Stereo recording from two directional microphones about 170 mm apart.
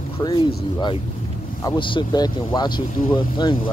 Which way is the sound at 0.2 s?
25° left (ahead or behind).